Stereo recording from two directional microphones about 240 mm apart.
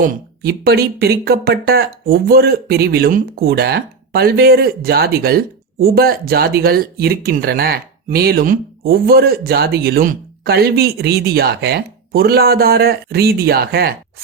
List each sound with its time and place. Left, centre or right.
0.0 s speech: right